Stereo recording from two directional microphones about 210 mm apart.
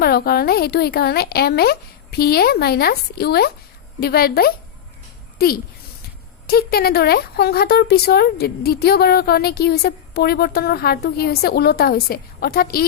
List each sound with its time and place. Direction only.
0.0 s speech: 45° left (ahead or behind)